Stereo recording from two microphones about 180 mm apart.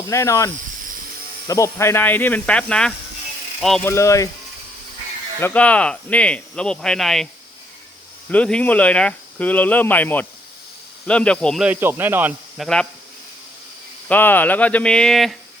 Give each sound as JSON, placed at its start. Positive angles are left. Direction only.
{"t": 0.1, "sound": "speech", "side_deg": 15}
{"t": 3.8, "sound": "speech", "side_deg": 15}
{"t": 5.4, "sound": "speech", "side_deg": 10}
{"t": 8.3, "sound": "speech", "side_deg": 5}
{"t": 11.6, "sound": "speech", "side_deg": -10}
{"t": 12.5, "sound": "speech", "side_deg": 5}
{"t": 14.1, "sound": "speech", "side_deg": 10}